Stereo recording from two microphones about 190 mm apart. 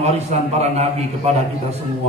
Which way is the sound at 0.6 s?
35° right (ahead or behind).